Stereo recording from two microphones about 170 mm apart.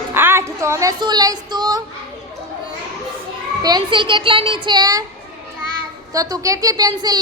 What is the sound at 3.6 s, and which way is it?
A child's voice, 25° right (ahead or behind).